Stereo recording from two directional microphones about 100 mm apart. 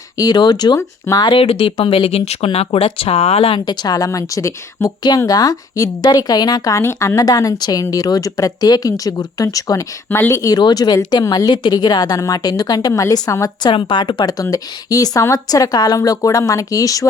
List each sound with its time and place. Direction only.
0.2 s speech: 45° left (ahead or behind)
1.3 s speech: 60° left (ahead or behind)
3.7 s a woman's voice: 45° left (ahead or behind)
10.1 s a woman's voice: 25° left (ahead or behind); by 13.7 s 40° left (ahead or behind)
13.7 s speech: 55° left (ahead or behind)
14.5 s a woman's voice: 35° left (ahead or behind)